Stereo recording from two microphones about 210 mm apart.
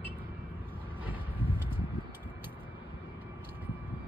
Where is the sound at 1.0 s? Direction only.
10° right (ahead or behind).